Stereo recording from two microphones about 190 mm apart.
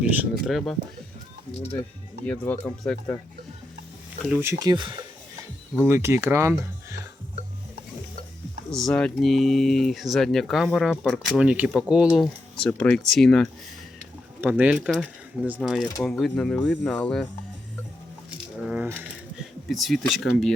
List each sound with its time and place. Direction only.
0.0 s speech: 5° right (ahead or behind)
2.2 s speech: 5° left (ahead or behind)
4.4 s speech: 15° right (ahead or behind)
5.8 s speech: 15° right (ahead or behind)
8.7 s speech: 5° left (ahead or behind)
14.4 s speech: 10° right (ahead or behind)
18.6 s coin: 5° right (ahead or behind)
19.6 s speech: centre (ahead or behind)